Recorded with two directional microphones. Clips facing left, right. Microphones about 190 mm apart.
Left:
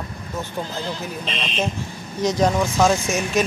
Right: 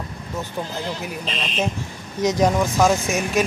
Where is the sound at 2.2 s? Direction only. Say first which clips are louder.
Right 1 dB; 15° right (ahead or behind).